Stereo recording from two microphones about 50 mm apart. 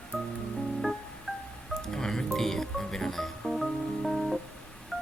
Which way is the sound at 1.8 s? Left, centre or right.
Centre.